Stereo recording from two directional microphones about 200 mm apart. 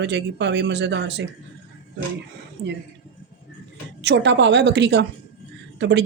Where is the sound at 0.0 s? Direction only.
60° right (ahead or behind).